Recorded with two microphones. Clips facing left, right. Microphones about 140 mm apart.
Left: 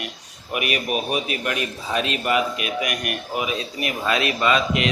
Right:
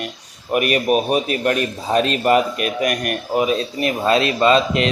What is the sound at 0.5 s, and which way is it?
A man's voice, 40° right (ahead or behind).